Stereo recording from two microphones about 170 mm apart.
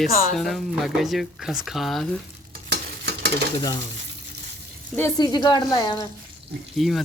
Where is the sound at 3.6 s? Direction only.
25° left (ahead or behind).